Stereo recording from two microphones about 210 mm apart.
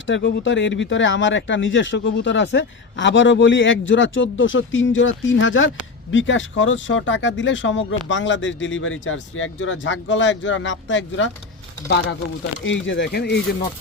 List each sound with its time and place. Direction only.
0.1 s speech: 60° left (ahead or behind)
12.6 s speech: 60° left (ahead or behind)